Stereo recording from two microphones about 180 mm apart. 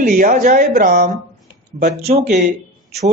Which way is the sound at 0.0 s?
50° right (ahead or behind).